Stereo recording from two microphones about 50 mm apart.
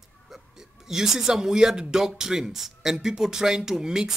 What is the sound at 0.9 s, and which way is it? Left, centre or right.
Speech, centre.